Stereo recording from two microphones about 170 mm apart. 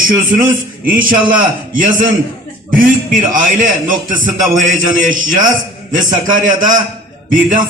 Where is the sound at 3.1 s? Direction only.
50° right (ahead or behind).